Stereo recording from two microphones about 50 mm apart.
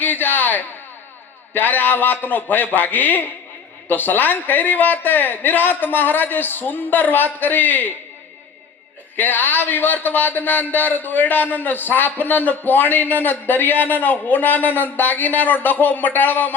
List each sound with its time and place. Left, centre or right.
0.0 s a sound: left
1.5 s speech: left
9.1 s speech: left